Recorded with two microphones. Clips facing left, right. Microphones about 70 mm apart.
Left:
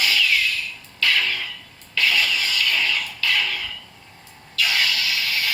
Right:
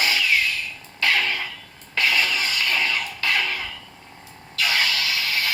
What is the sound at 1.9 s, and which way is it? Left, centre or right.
Music, right.